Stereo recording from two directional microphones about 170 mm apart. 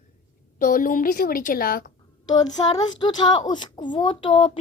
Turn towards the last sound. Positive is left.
turn(degrees=30)  # may be behind; listen again after turning